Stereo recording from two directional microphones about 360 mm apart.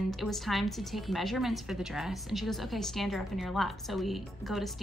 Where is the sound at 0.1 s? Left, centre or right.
Centre.